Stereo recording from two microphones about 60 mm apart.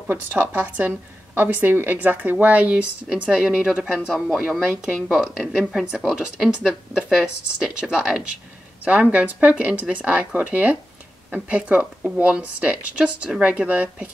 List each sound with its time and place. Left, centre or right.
0.3 s a woman's voice: right; by 8.2 s centre
8.8 s speech: right